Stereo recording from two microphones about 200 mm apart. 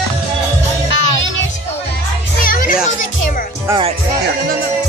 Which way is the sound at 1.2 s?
70° left (ahead or behind).